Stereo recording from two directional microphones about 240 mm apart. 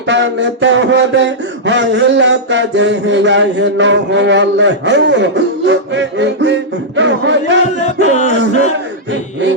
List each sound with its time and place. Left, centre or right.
0.1 s a man's voice: right
8.1 s music: left